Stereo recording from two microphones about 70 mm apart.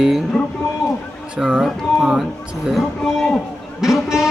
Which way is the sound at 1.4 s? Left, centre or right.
Centre.